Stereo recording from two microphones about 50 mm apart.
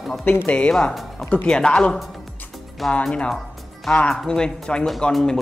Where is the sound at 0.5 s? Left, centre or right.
Left.